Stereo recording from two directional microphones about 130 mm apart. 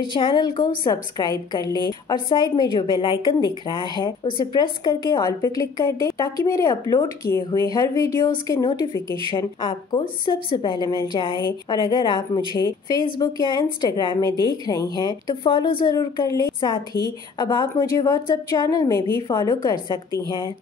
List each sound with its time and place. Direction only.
0.1 s a woman's voice: 40° left (ahead or behind)
8.9 s speech: 40° right (ahead or behind)
9.3 s a woman's voice: 35° left (ahead or behind)